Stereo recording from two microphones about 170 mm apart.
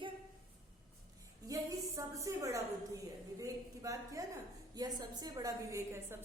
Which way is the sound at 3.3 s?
20° right (ahead or behind).